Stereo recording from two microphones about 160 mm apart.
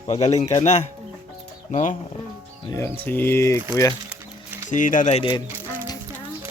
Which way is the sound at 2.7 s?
15° left (ahead or behind).